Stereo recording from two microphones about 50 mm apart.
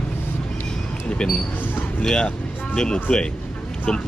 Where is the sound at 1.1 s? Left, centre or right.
Centre.